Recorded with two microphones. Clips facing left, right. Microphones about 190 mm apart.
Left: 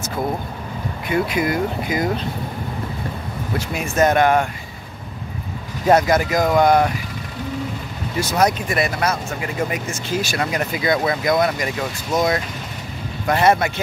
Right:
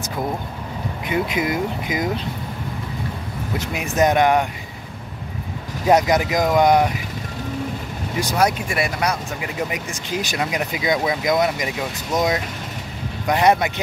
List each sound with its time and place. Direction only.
1.0 s speech: 20° right (ahead or behind)
3.5 s speech: 20° right (ahead or behind)
5.9 s speech: 15° right (ahead or behind)
8.2 s speech: 10° right (ahead or behind)
13.3 s speech: 15° right (ahead or behind)